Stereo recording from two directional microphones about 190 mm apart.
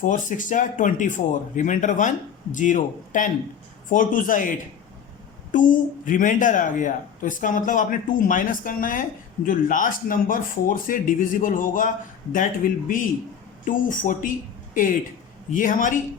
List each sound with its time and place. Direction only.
0.0 s speech: 45° left (ahead or behind)